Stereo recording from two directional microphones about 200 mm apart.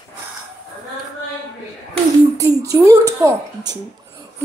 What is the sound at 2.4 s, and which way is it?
A woman's voice, 15° right (ahead or behind).